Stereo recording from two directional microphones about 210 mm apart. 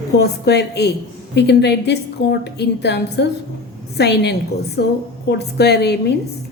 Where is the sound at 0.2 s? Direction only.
50° left (ahead or behind).